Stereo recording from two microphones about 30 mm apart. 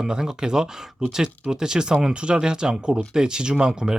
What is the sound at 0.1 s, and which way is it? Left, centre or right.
Speech, right.